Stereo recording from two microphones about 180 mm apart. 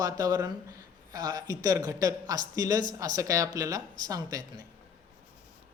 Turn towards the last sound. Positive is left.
turn(degrees=-20)  # may be behind; listen again after turning